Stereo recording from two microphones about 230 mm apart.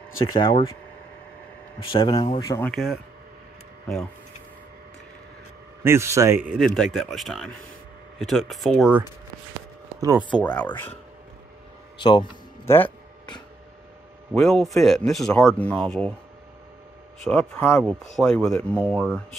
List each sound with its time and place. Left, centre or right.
0.3 s speech: left
1.8 s speech: left
2.7 s speech: centre
5.9 s a man's voice: centre
6.6 s speech: centre
9.9 s speech: centre
10.4 s speech: centre
12.0 s a sound: centre
14.3 s speech: centre
17.2 s speech: centre